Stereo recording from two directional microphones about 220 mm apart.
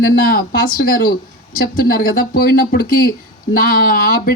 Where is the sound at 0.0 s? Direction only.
40° left (ahead or behind).